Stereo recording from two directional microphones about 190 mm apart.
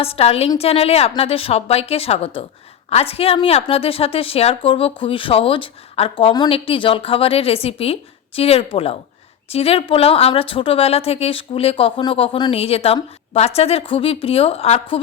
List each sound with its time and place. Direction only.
0.0 s a woman's voice: 30° left (ahead or behind)